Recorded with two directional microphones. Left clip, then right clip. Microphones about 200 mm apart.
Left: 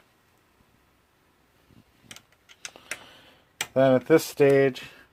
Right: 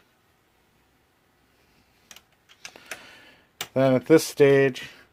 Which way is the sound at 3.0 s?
35° right (ahead or behind).